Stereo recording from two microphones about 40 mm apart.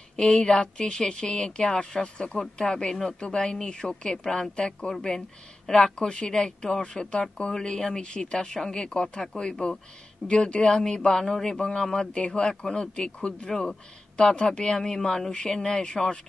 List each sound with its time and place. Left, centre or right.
0.1 s speech: centre
2.1 s speech: left; by 4.5 s centre
5.7 s speech: centre
5.9 s speech: left